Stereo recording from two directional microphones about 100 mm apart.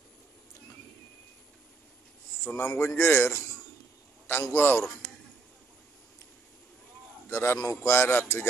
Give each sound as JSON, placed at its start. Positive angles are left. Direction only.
{"t": 2.4, "sound": "a man's voice", "side_deg": 25}
{"t": 7.2, "sound": "a man's voice", "side_deg": 25}